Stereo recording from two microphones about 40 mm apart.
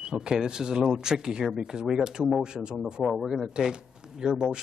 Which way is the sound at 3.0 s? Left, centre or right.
Centre.